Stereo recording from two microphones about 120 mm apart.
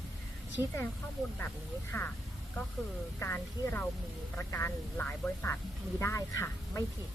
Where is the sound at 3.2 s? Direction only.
20° left (ahead or behind).